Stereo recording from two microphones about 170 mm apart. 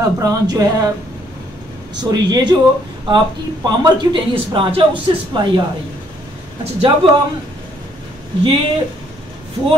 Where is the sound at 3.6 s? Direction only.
25° right (ahead or behind).